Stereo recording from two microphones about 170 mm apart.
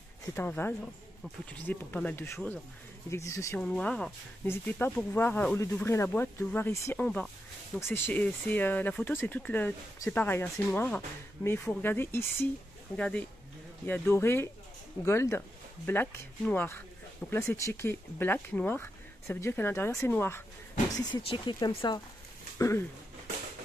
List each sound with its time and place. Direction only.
0.2 s speech: 15° left (ahead or behind)
3.6 s speech: 5° left (ahead or behind)
20.9 s speech: 30° left (ahead or behind)